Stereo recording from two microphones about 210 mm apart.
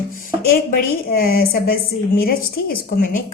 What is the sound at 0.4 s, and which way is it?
A woman's voice, 45° left (ahead or behind).